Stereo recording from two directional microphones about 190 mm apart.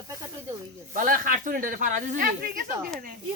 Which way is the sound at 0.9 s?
45° right (ahead or behind).